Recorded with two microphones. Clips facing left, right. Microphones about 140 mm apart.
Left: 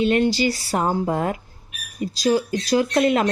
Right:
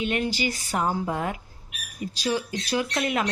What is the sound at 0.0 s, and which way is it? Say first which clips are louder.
Speech: left 8 dB; 35° left (ahead or behind).